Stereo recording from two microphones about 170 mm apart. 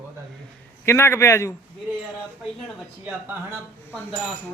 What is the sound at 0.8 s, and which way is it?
Speech, 15° left (ahead or behind).